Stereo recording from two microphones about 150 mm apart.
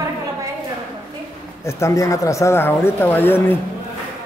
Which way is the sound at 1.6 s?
20° left (ahead or behind).